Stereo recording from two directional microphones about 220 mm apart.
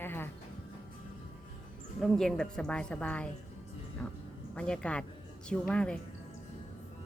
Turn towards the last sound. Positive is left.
turn(degrees=5)  # may be behind; listen again after turning